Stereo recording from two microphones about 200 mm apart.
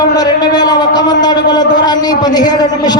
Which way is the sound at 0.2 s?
20° left (ahead or behind).